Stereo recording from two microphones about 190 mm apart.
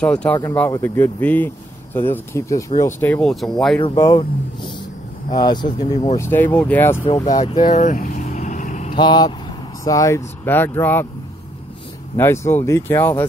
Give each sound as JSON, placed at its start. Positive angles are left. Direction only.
{"t": 0.0, "sound": "speech", "side_deg": 5}
{"t": 3.8, "sound": "speech", "side_deg": 20}
{"t": 5.3, "sound": "speech", "side_deg": 20}
{"t": 6.1, "sound": "speech", "side_deg": 10}
{"t": 7.7, "sound": "vehicle", "side_deg": 45}
{"t": 8.9, "sound": "speech", "side_deg": 25}
{"t": 12.2, "sound": "speech", "side_deg": 10}